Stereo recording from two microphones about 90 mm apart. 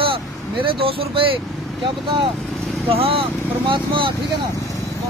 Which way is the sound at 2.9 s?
90° right.